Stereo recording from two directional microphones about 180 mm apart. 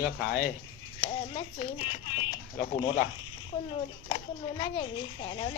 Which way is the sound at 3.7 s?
30° left (ahead or behind).